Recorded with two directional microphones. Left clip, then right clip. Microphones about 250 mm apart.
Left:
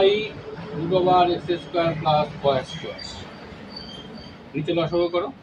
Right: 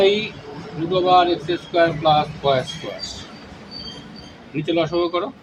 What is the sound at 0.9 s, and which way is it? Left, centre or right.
Speech, right.